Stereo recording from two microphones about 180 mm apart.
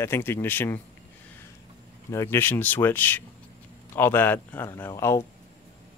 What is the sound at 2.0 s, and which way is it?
Speech, 15° left (ahead or behind).